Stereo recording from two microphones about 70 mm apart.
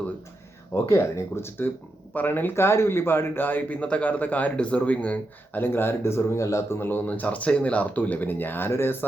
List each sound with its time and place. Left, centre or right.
0.7 s a man's voice: left